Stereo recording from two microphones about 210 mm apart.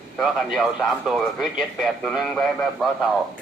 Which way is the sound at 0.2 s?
Centre (ahead or behind).